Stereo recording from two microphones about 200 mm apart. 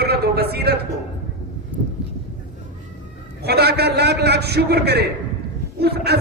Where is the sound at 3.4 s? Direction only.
55° right (ahead or behind).